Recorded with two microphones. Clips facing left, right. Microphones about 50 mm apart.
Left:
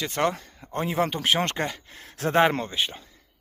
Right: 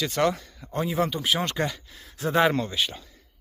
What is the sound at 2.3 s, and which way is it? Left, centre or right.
Speech, left.